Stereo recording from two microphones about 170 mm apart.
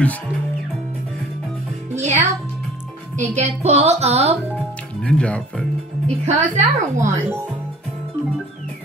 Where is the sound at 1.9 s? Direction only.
40° right (ahead or behind).